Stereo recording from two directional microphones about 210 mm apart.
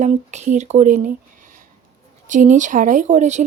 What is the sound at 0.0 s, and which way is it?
Speech, 35° right (ahead or behind).